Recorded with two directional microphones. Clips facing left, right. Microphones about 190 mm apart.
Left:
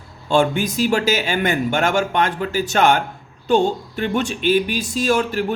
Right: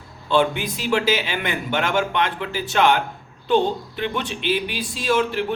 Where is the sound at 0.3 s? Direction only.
45° left (ahead or behind).